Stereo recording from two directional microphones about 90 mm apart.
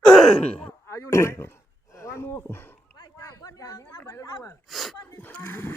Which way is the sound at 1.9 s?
35° left (ahead or behind).